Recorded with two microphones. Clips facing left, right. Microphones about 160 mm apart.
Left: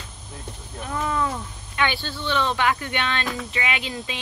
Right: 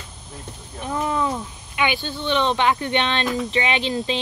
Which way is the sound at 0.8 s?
20° right (ahead or behind).